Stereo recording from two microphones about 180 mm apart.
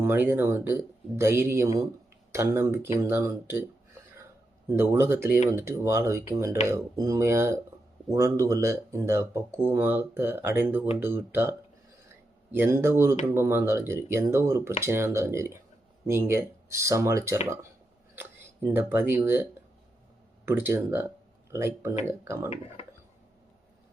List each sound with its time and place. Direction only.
0.0 s speech: 10° right (ahead or behind)
4.7 s speech: 15° right (ahead or behind)